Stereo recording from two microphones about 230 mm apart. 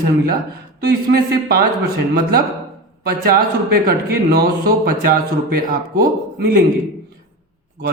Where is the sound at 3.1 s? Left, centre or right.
Right.